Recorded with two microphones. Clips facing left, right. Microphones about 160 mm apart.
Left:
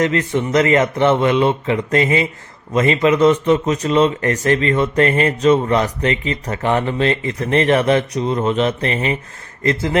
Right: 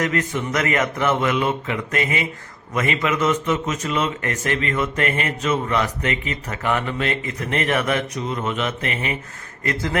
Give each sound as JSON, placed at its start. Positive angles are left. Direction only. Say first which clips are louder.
{"t": 0.0, "sound": "a man's voice", "louder": "left 5 dB", "side_deg": 30}